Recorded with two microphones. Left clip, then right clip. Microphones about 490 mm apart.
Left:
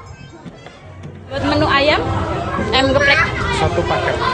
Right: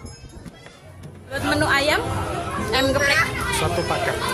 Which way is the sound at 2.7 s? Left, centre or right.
Right.